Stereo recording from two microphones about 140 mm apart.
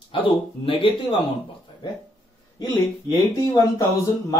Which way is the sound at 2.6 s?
30° left (ahead or behind).